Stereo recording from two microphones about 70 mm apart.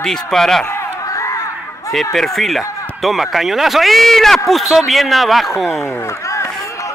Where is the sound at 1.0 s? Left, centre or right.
Left.